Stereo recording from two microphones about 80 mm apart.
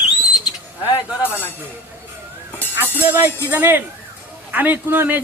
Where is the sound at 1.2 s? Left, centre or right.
Left.